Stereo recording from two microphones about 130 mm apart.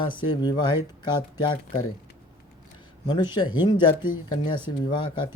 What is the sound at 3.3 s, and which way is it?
Speech, 35° left (ahead or behind).